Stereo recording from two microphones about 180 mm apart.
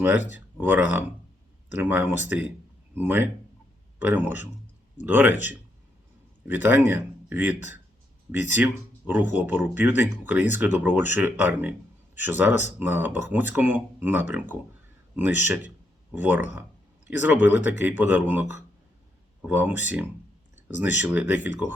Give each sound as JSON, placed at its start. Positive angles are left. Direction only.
{"t": 0.0, "sound": "speech", "side_deg": -10}